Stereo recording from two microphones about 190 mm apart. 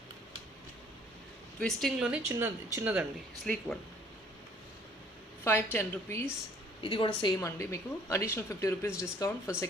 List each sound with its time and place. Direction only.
1.5 s speech: centre (ahead or behind)
3.4 s speech: centre (ahead or behind)
5.4 s a woman's voice: 10° left (ahead or behind)
6.8 s a woman's voice: 25° left (ahead or behind)